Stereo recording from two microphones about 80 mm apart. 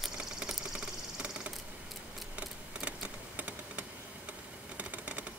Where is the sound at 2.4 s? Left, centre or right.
Centre.